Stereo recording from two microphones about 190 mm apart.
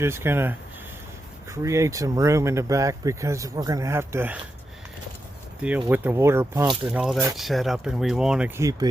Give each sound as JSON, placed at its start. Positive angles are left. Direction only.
{"t": 0.0, "sound": "speech", "side_deg": -15}
{"t": 5.6, "sound": "speech", "side_deg": -10}
{"t": 6.8, "sound": "speech", "side_deg": 0}